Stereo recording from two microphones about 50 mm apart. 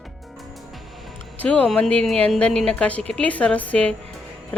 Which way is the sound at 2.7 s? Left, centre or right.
Left.